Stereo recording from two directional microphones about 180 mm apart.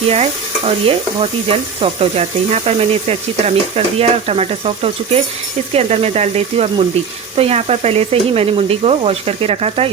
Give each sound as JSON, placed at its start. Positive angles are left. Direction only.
{"t": 0.1, "sound": "stir", "side_deg": -35}